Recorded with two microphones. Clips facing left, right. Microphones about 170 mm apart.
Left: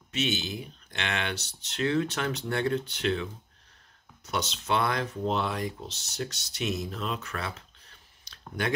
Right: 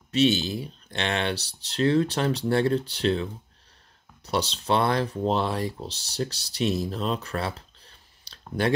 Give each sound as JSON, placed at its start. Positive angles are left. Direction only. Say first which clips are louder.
{"t": 0.1, "sound": "speech", "louder": "right 8 dB", "side_deg": -35}